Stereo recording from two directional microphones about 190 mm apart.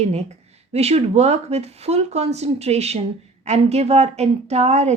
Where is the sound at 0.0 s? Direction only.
35° right (ahead or behind).